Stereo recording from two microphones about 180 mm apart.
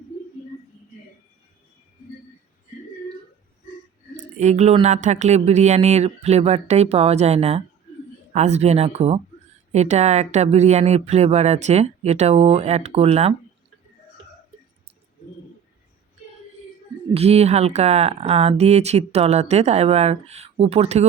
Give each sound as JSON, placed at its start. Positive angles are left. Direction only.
{"t": 4.4, "sound": "speech", "side_deg": -40}
{"t": 17.2, "sound": "speech", "side_deg": -35}